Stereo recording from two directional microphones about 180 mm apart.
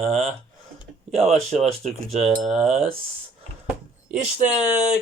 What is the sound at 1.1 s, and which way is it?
Speech, 35° right (ahead or behind).